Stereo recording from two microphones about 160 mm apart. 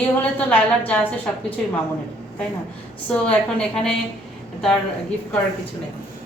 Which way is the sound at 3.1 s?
5° left (ahead or behind).